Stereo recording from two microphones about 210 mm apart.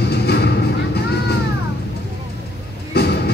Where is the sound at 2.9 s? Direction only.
50° left (ahead or behind).